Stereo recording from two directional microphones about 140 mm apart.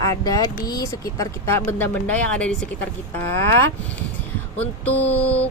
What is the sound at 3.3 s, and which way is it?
Speech, 20° left (ahead or behind).